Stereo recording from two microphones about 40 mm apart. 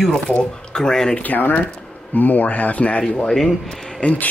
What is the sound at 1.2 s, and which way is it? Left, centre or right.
Speech, left.